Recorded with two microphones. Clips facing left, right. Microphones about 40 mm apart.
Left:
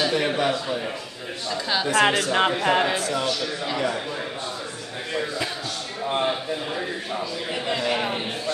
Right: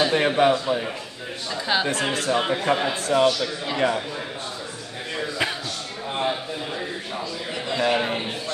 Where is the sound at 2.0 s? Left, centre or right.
Left.